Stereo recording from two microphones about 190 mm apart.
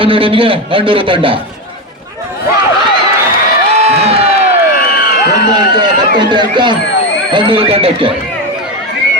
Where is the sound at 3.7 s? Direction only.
35° right (ahead or behind).